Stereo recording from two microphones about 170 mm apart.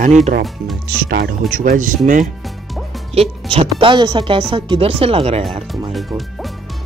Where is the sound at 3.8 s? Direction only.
30° right (ahead or behind).